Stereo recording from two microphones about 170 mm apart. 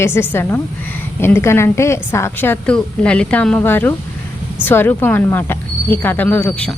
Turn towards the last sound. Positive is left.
turn(degrees=5)  # may be behind; listen again after turning